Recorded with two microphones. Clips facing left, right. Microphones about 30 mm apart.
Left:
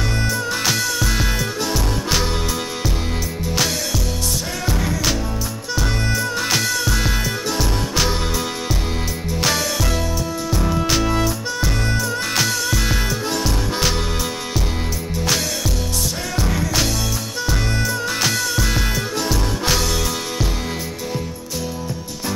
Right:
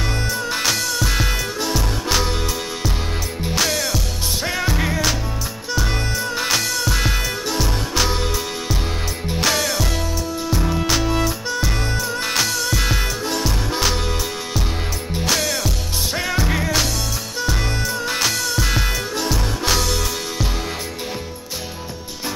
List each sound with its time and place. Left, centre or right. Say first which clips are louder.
0.0 s music: left 1 dB; centre
3.5 s music: right 1 dB; centre
4.7 s music: right 1 dB; right
5.8 s music: left 2 dB; centre
9.4 s music: right 1 dB; centre
15.2 s music: right 1 dB; centre
16.4 s music: right 1 dB; right
17.5 s music: left 2 dB; centre